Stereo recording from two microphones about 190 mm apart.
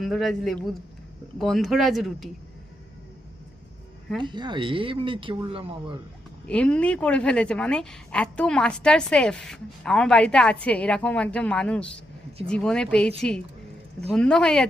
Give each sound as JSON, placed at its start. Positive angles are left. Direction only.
{"t": 0.0, "sound": "a woman's voice", "side_deg": 0}
{"t": 4.2, "sound": "speech", "side_deg": -25}
{"t": 6.5, "sound": "a woman's voice", "side_deg": 5}
{"t": 14.1, "sound": "a woman's voice", "side_deg": 5}